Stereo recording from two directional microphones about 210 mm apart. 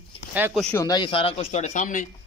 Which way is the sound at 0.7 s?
15° left (ahead or behind).